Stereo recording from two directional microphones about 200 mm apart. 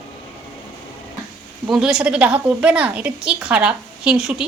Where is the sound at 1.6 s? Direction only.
Centre (ahead or behind).